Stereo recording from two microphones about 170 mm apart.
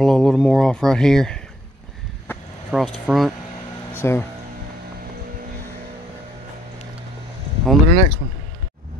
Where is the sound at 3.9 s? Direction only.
15° left (ahead or behind).